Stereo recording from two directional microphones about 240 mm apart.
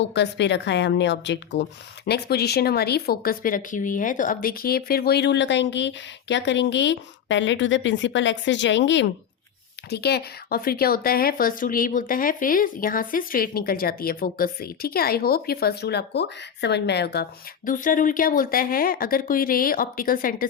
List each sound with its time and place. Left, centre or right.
0.0 s speech: left